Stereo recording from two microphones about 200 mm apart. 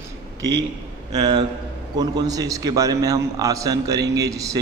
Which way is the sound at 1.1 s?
25° right (ahead or behind).